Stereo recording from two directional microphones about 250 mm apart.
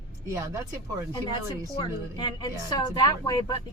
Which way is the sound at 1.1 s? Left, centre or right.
Centre.